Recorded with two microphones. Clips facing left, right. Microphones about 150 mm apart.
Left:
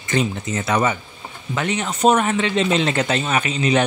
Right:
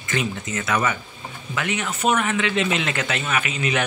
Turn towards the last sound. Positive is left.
turn(degrees=30)  # may be behind; listen again after turning